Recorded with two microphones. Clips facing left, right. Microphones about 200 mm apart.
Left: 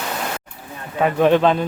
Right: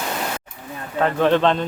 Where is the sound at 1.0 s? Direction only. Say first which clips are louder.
Left 2 dB; 10° left (ahead or behind).